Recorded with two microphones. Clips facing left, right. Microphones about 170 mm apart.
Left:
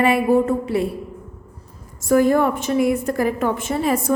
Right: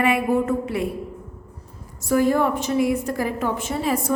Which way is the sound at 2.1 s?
50° left (ahead or behind).